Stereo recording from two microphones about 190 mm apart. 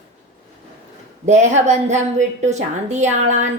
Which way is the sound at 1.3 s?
35° right (ahead or behind).